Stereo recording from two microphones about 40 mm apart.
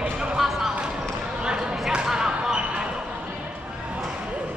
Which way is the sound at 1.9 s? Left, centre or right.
Centre.